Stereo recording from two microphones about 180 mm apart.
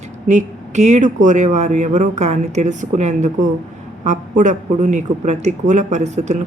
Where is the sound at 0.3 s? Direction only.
40° right (ahead or behind).